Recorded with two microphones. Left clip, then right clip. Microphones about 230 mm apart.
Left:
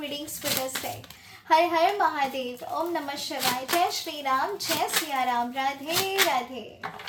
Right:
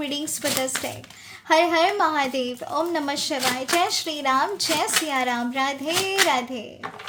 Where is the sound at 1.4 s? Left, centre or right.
Right.